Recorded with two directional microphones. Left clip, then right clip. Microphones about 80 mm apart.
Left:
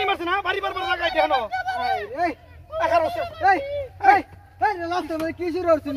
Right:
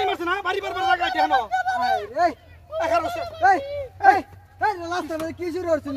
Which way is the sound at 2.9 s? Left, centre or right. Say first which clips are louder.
Left 2 dB; centre.